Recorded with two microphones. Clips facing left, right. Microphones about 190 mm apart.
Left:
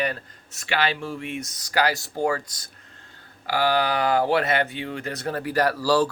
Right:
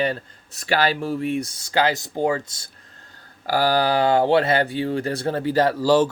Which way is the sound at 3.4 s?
40° right (ahead or behind).